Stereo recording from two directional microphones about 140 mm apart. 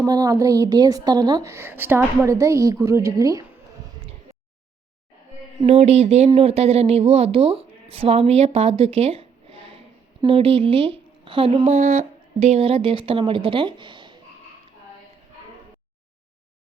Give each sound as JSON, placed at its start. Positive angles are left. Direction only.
{"t": 0.0, "sound": "a woman's voice", "side_deg": -25}
{"t": 5.6, "sound": "speech", "side_deg": -50}